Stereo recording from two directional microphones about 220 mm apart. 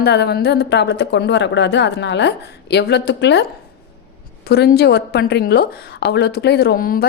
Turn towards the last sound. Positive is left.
turn(degrees=40)  # may be behind; listen again after turning